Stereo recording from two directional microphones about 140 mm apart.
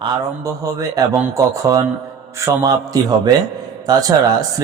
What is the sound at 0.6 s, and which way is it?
Speech, 25° right (ahead or behind).